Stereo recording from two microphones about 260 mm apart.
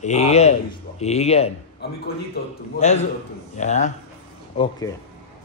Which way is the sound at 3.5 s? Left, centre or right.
Left.